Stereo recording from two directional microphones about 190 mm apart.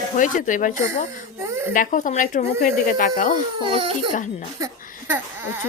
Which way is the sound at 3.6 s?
30° right (ahead or behind).